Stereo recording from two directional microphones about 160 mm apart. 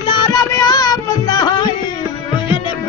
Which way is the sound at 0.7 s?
25° left (ahead or behind).